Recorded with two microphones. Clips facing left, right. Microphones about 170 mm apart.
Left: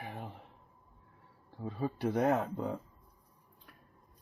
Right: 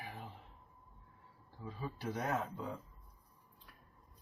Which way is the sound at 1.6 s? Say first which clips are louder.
Left 9 dB; 60° left (ahead or behind).